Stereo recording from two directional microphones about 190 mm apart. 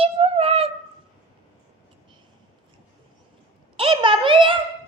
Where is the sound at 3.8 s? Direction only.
30° right (ahead or behind).